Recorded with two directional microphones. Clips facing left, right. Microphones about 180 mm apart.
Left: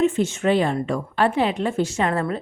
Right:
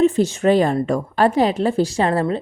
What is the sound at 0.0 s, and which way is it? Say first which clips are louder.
A woman's voice: right 4 dB; 40° right (ahead or behind).